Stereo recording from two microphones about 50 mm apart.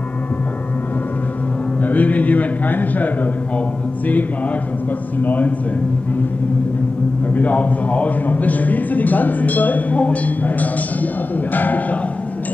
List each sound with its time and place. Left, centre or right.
1.8 s a man's voice: left
5.2 s a man's voice: left
7.3 s a man's voice: left